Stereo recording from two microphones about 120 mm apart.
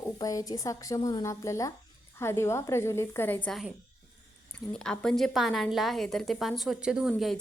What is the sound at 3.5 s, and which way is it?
A woman's voice, centre (ahead or behind).